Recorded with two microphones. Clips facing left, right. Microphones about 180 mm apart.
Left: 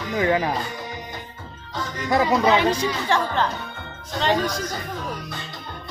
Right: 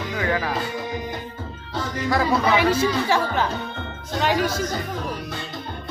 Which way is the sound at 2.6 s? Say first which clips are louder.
Right 2 dB; 10° right (ahead or behind).